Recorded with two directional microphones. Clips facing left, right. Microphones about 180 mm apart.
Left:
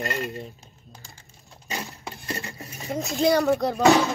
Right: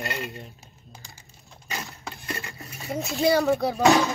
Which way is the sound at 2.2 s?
35° left (ahead or behind).